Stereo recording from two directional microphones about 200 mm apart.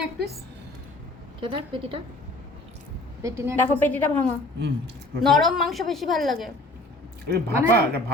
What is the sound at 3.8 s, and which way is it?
A woman's voice, 10° left (ahead or behind).